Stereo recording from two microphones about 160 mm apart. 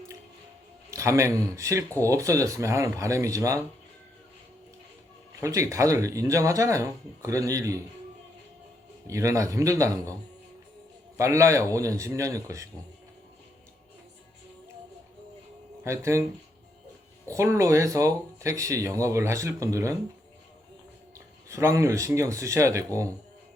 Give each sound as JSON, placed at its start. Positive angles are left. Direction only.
{"t": 0.9, "sound": "speech", "side_deg": -20}
{"t": 5.4, "sound": "speech", "side_deg": -20}
{"t": 9.0, "sound": "speech", "side_deg": -20}
{"t": 11.2, "sound": "speech", "side_deg": -20}
{"t": 15.8, "sound": "speech", "side_deg": -15}
{"t": 17.3, "sound": "speech", "side_deg": -20}
{"t": 21.5, "sound": "speech", "side_deg": -20}